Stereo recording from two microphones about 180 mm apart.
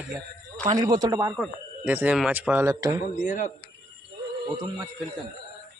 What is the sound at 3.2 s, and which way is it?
Speech, 45° left (ahead or behind).